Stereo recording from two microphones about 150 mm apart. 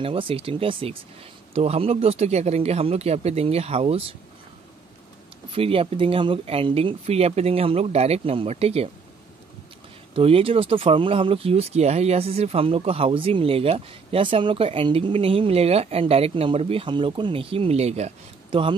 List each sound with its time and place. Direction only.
0.0 s speech: 35° right (ahead or behind)
5.5 s speech: 40° right (ahead or behind)
10.1 s speech: 40° right (ahead or behind)